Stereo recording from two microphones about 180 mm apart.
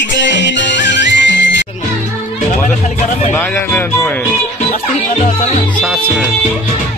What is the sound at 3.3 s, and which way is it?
Music, 10° left (ahead or behind).